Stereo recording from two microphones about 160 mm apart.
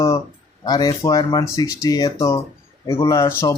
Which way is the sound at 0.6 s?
25° left (ahead or behind).